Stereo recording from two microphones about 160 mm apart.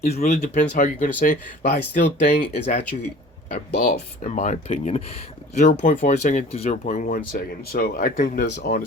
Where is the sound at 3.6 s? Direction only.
55° left (ahead or behind).